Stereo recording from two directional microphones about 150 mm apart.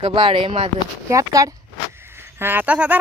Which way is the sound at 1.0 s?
20° right (ahead or behind).